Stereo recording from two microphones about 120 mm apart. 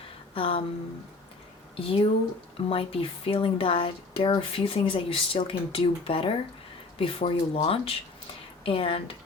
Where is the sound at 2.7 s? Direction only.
50° left (ahead or behind).